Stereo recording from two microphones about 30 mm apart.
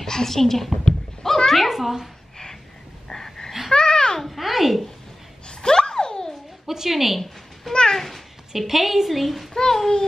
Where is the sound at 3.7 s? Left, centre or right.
Left.